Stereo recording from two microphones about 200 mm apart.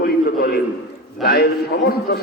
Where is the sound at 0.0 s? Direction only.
50° left (ahead or behind).